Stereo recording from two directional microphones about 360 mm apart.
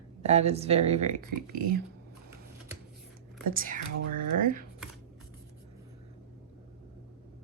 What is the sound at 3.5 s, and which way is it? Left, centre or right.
Speech, right.